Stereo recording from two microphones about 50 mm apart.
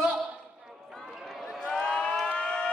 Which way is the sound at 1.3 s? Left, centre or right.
Centre.